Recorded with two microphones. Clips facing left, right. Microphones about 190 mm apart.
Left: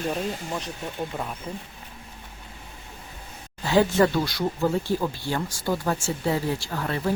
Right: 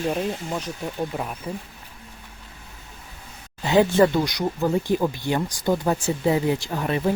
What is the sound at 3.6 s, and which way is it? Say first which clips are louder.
Speech: right 3 dB; 20° right (ahead or behind).